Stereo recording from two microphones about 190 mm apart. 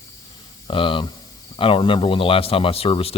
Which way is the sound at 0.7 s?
25° left (ahead or behind).